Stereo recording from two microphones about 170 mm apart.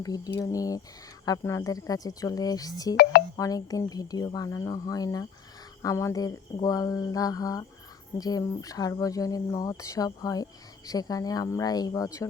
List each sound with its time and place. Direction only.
0.0 s speech: 20° left (ahead or behind)